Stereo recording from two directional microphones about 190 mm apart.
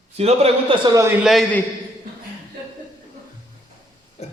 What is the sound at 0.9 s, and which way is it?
Speech, 10° right (ahead or behind).